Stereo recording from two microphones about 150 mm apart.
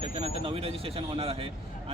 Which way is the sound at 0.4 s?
40° right (ahead or behind).